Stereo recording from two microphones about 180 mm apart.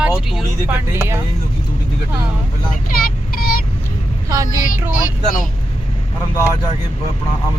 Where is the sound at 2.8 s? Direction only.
55° left (ahead or behind).